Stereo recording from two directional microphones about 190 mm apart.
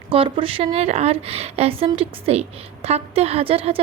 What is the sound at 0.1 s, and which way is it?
A woman's voice, 30° right (ahead or behind).